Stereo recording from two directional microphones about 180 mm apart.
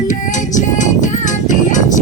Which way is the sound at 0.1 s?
45° left (ahead or behind).